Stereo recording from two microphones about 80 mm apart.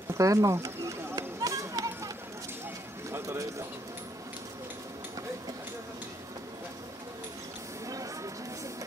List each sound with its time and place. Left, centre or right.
0.1 s children playing: right
3.1 s bird: right
7.9 s a sound: right